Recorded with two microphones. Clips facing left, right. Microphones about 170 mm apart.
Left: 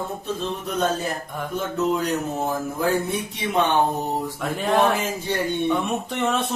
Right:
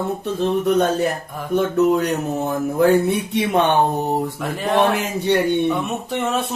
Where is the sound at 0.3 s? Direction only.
65° right (ahead or behind).